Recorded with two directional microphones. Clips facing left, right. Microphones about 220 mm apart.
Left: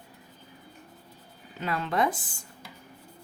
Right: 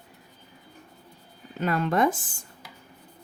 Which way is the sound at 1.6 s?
50° right (ahead or behind).